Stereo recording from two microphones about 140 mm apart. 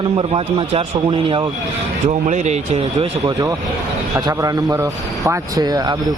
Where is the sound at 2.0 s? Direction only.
55° right (ahead or behind).